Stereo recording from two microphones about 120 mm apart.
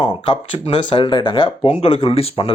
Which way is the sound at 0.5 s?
40° left (ahead or behind).